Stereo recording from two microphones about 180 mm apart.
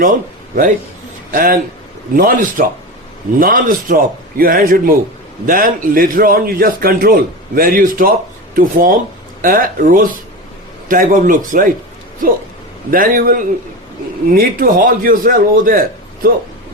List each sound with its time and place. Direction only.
0.0 s a man's voice: 50° right (ahead or behind)